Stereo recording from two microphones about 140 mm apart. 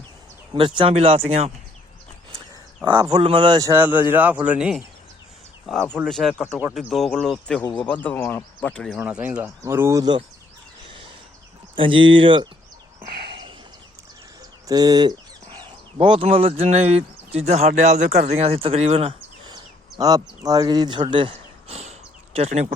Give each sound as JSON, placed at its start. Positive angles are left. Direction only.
{"t": 0.5, "sound": "speech", "side_deg": -35}
{"t": 2.8, "sound": "speech", "side_deg": -30}
{"t": 3.6, "sound": "speech", "side_deg": -15}
{"t": 5.6, "sound": "speech", "side_deg": 5}
{"t": 9.0, "sound": "speech", "side_deg": -10}
{"t": 11.8, "sound": "speech", "side_deg": -35}
{"t": 14.7, "sound": "bird", "side_deg": -30}
{"t": 16.0, "sound": "speech", "side_deg": -40}
{"t": 19.5, "sound": "a sound", "side_deg": -30}